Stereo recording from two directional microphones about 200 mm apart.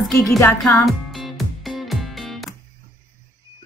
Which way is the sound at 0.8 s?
Centre (ahead or behind).